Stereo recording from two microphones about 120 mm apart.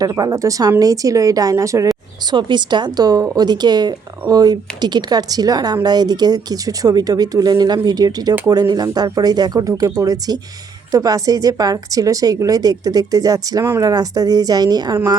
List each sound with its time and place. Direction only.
0.0 s a woman's voice: 30° right (ahead or behind)
2.3 s speech: 40° right (ahead or behind)